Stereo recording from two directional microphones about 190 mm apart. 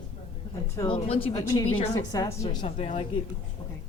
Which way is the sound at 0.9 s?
30° left (ahead or behind).